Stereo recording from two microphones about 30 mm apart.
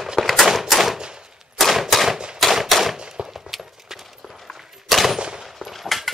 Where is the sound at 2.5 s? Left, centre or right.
Centre.